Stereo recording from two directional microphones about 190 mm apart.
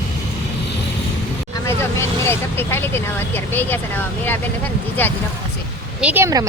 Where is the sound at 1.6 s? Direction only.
15° left (ahead or behind).